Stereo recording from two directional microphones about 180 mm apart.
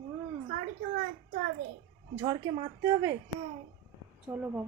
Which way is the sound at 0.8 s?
50° right (ahead or behind).